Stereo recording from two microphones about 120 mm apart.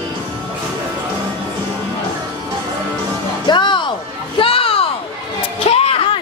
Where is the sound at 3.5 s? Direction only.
40° left (ahead or behind).